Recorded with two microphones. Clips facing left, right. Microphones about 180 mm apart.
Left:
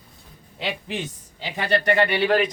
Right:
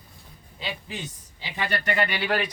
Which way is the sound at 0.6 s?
85° left.